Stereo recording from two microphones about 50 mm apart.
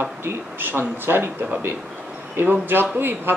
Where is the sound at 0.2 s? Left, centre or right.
Right.